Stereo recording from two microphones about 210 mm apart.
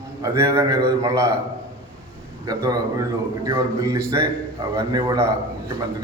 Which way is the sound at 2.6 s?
15° right (ahead or behind).